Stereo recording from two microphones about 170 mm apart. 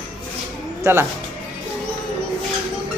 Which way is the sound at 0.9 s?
15° right (ahead or behind).